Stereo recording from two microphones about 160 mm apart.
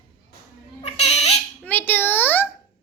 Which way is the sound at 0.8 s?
40° left (ahead or behind).